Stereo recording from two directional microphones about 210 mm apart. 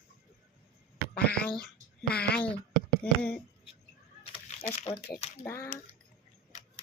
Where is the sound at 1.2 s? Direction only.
5° left (ahead or behind).